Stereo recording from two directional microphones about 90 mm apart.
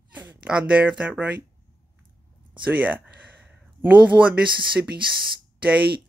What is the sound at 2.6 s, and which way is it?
Speech, 15° right (ahead or behind).